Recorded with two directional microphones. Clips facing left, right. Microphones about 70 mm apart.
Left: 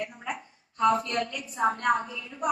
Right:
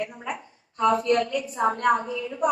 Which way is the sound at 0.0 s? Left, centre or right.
Right.